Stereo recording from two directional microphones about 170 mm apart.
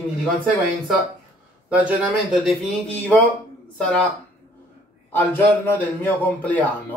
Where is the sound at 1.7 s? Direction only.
10° right (ahead or behind).